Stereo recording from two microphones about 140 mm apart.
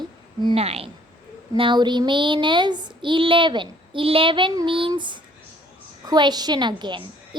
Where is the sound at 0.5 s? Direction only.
45° right (ahead or behind).